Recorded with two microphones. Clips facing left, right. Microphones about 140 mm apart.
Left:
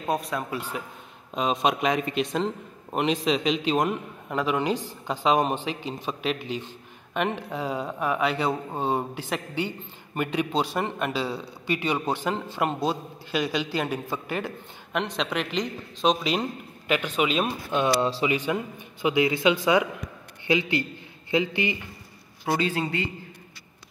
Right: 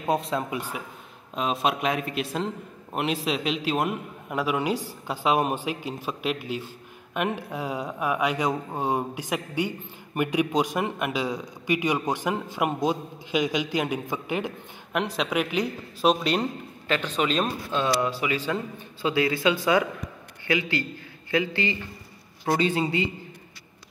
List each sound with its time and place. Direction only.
0.0 s speech: 25° right (ahead or behind)
0.6 s a man's voice: 10° right (ahead or behind)
1.3 s a man's voice: centre (ahead or behind)
14.9 s a man's voice: 5° right (ahead or behind)
16.8 s a man's voice: 10° left (ahead or behind)
22.4 s a man's voice: 5° left (ahead or behind)